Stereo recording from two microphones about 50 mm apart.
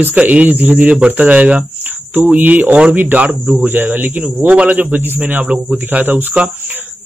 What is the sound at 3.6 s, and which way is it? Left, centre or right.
Speech, right.